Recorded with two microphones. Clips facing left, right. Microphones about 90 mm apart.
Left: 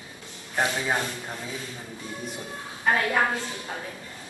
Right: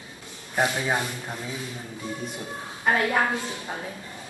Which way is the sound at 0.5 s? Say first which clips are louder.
Right 1 dB; 5° right (ahead or behind).